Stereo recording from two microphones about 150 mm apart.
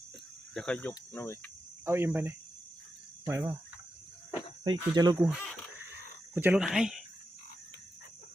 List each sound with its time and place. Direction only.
0.5 s speech: 5° left (ahead or behind)
1.8 s speech: 15° right (ahead or behind)
4.6 s speech: 30° right (ahead or behind); by 7.0 s 5° right (ahead or behind)